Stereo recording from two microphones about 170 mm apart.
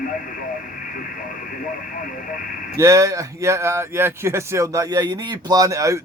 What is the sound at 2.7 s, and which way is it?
Speech, 15° right (ahead or behind).